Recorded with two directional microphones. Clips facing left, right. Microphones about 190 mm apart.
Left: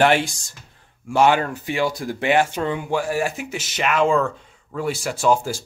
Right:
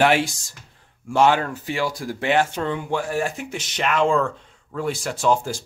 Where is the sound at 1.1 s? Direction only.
10° left (ahead or behind).